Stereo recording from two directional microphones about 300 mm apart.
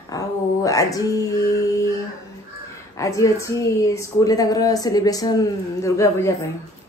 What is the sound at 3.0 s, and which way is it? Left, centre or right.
A woman's voice, centre.